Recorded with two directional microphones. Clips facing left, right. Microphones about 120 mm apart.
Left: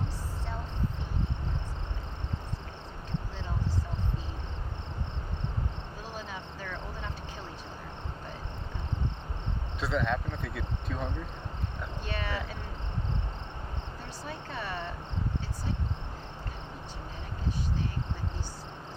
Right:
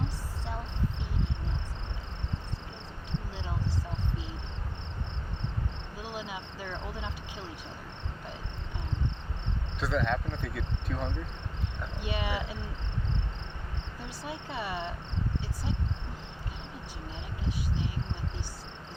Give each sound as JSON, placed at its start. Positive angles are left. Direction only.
{"t": 6.0, "sound": "insect", "side_deg": -10}
{"t": 9.8, "sound": "cricket", "side_deg": 0}
{"t": 12.0, "sound": "speech", "side_deg": -10}
{"t": 14.3, "sound": "speech", "side_deg": -10}